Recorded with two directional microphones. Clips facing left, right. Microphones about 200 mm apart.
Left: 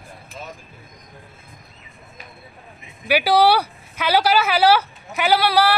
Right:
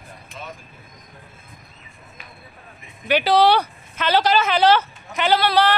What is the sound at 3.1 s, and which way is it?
Speech, 10° left (ahead or behind).